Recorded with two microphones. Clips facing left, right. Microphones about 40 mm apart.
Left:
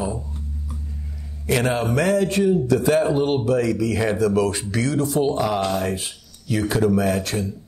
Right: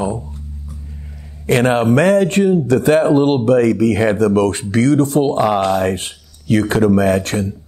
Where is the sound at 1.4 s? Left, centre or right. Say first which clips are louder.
Right 7 dB; right.